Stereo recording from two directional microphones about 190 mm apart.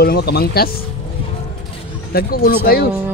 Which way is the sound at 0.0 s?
55° left (ahead or behind).